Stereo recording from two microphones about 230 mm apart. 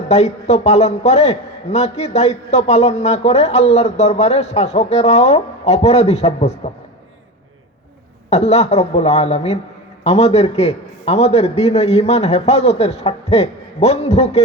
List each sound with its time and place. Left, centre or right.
0.1 s a man's voice: left
8.3 s a man's voice: left